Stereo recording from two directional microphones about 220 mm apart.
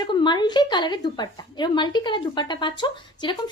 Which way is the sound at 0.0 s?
20° left (ahead or behind).